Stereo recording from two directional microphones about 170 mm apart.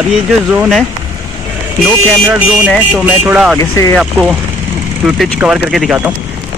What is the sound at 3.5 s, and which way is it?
Speech, 20° left (ahead or behind).